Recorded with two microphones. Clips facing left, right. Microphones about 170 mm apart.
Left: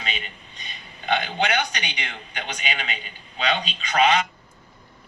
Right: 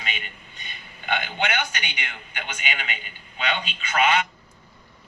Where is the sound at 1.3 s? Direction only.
35° left (ahead or behind).